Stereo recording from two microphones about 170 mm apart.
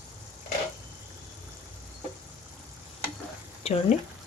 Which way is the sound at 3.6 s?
35° left (ahead or behind).